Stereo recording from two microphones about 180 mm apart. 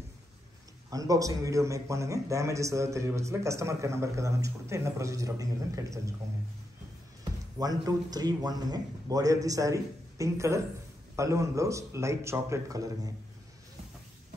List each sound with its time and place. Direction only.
0.8 s a man's voice: 20° right (ahead or behind)
7.5 s a man's voice: 20° right (ahead or behind)